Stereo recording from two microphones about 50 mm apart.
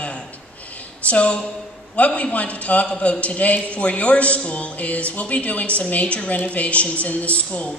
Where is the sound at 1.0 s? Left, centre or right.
Left.